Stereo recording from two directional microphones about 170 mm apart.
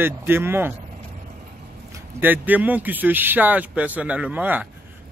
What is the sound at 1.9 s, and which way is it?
Speech, 10° right (ahead or behind).